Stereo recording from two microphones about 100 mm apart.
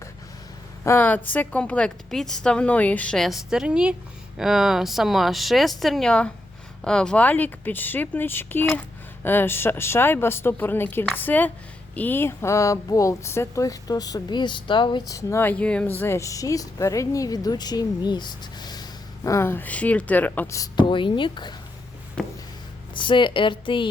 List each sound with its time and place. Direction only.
0.9 s a woman's voice: 15° left (ahead or behind)
3.2 s a woman's voice: centre (ahead or behind); by 15.0 s 55° left (ahead or behind)
15.0 s a woman's voice: 35° left (ahead or behind)
15.4 s a woman's voice: 15° left (ahead or behind)
20.7 s speech: 55° left (ahead or behind)
22.2 s a sound: 10° left (ahead or behind)
23.0 s a woman's voice: 55° left (ahead or behind)